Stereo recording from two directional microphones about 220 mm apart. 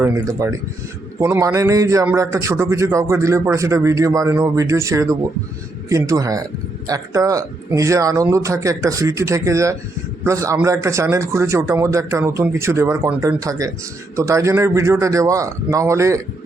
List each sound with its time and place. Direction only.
0.0 s speech: 10° right (ahead or behind)